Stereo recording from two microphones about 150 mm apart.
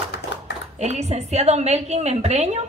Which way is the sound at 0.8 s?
45° right (ahead or behind).